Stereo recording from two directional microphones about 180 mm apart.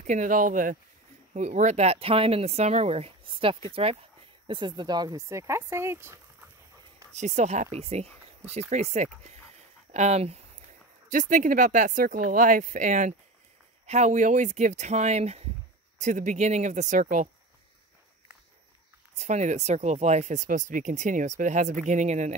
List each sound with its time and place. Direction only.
0.0 s speech: 45° right (ahead or behind); by 6.5 s 15° right (ahead or behind)
7.2 s speech: 40° right (ahead or behind)
19.1 s speech: 40° right (ahead or behind)